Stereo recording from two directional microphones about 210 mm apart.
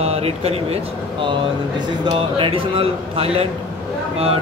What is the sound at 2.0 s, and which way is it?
A man's voice, 25° right (ahead or behind).